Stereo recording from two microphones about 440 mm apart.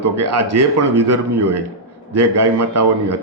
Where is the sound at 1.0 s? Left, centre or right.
Right.